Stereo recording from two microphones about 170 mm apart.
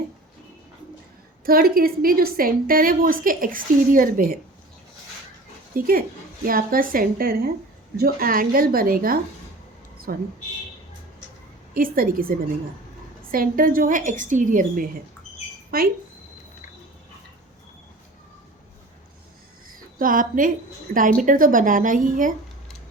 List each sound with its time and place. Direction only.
1.5 s a woman's voice: 60° right (ahead or behind)
5.7 s a woman's voice: 60° right (ahead or behind)
11.7 s a woman's voice: 55° right (ahead or behind)
13.3 s a woman's voice: 55° right (ahead or behind)
20.0 s a woman's voice: 55° right (ahead or behind)